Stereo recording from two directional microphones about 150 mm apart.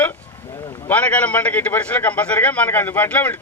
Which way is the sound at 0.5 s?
25° left (ahead or behind).